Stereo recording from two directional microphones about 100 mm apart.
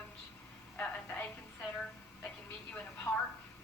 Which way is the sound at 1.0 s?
25° left (ahead or behind).